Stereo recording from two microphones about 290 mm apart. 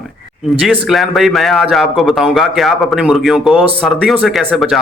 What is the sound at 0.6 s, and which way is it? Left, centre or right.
A man's voice, centre.